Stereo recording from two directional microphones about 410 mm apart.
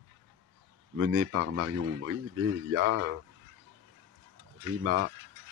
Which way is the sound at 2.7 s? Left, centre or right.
Right.